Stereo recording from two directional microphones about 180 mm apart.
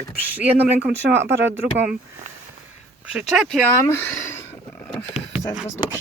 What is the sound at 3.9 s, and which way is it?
Speech, 10° left (ahead or behind).